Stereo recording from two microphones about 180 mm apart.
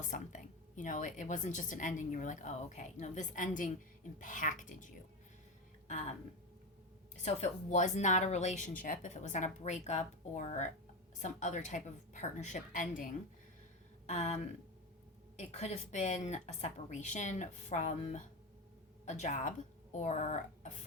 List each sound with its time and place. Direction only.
0.0 s a woman's voice: 45° left (ahead or behind)
7.2 s a woman's voice: 40° left (ahead or behind)
14.1 s speech: 40° left (ahead or behind)